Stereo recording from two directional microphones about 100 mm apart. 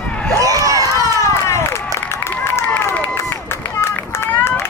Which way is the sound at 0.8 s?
30° left (ahead or behind).